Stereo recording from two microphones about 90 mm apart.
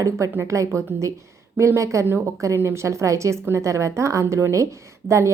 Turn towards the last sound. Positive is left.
turn(degrees=-35)  # may be behind; listen again after turning